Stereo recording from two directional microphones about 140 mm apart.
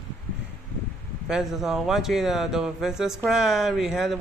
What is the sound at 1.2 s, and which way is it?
Speech, centre (ahead or behind).